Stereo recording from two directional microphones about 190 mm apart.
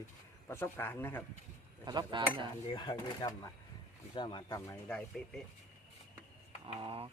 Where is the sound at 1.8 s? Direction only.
20° right (ahead or behind).